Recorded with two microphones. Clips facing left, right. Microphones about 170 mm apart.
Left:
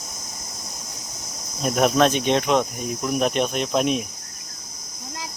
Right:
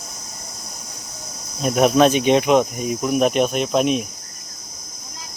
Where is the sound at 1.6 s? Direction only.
5° right (ahead or behind).